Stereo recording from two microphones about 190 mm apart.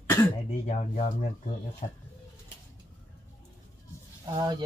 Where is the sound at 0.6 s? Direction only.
40° left (ahead or behind).